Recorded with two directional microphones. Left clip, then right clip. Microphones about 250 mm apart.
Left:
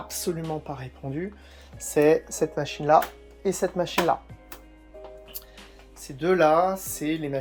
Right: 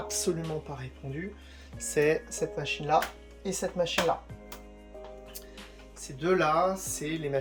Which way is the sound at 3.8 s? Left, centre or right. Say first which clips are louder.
Left 2 dB; left.